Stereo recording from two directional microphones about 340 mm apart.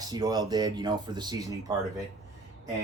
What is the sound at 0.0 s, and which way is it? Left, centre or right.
Speech, centre.